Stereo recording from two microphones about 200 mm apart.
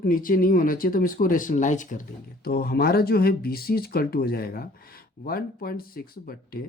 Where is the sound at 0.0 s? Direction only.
45° left (ahead or behind).